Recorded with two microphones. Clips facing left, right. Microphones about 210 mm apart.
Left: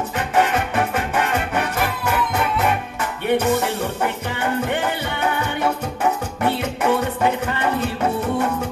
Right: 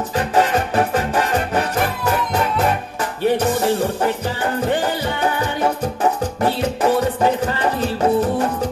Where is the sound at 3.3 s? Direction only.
35° right (ahead or behind).